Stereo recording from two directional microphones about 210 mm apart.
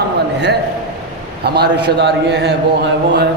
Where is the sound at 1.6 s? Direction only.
55° right (ahead or behind).